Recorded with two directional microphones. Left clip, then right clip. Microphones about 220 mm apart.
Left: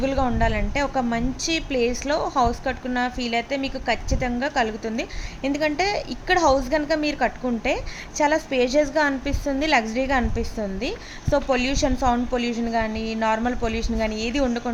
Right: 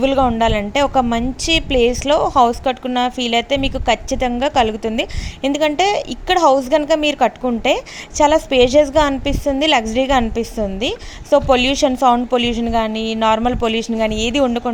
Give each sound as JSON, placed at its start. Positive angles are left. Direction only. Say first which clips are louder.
{"t": 0.0, "sound": "a woman's voice", "louder": "right 8 dB", "side_deg": -30}
{"t": 12.9, "sound": "a sound", "louder": "right 7 dB", "side_deg": -5}
{"t": 13.1, "sound": "a woman's voice", "louder": "right 7 dB", "side_deg": -35}